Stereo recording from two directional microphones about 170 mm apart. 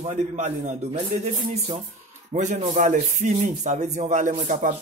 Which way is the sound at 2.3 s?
45° right (ahead or behind).